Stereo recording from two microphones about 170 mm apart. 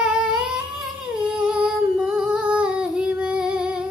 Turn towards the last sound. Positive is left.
turn(degrees=-5)  # may be behind; listen again after turning